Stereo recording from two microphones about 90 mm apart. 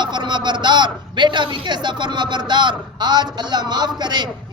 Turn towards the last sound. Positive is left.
turn(degrees=-55)  # may be behind; listen again after turning